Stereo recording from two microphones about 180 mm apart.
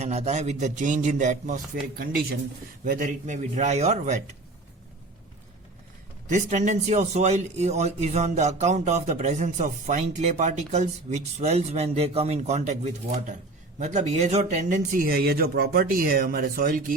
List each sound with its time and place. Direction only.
0.0 s speech: 40° right (ahead or behind)
1.7 s speech: 55° right (ahead or behind); by 4.2 s 40° right (ahead or behind)
6.2 s speech: 40° right (ahead or behind)